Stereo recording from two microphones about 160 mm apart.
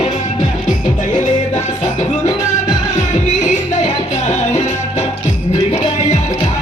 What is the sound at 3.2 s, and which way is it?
Music, 50° left (ahead or behind).